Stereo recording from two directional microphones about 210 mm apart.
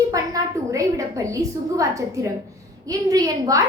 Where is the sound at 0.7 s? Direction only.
15° right (ahead or behind).